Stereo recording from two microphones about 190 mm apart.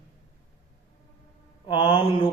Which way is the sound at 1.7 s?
25° left (ahead or behind).